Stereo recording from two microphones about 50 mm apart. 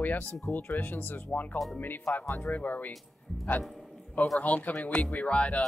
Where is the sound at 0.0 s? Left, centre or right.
Left.